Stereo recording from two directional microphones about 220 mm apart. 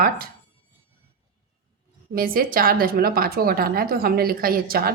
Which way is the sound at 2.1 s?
40° right (ahead or behind).